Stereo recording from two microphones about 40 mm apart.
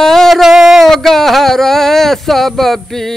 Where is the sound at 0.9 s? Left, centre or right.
Centre.